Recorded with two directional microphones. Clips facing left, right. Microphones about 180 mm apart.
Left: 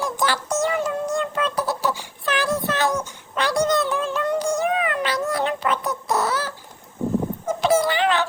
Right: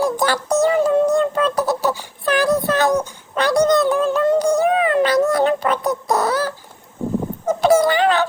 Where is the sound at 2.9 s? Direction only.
50° right (ahead or behind); by 5.0 s 30° right (ahead or behind).